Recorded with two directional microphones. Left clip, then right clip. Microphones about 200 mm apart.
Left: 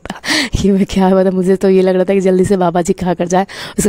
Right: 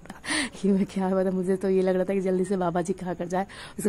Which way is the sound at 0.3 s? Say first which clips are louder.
Left 12 dB; 40° left (ahead or behind).